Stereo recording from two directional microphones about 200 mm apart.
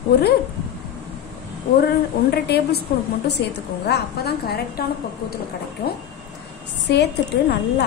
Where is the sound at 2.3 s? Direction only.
55° left (ahead or behind).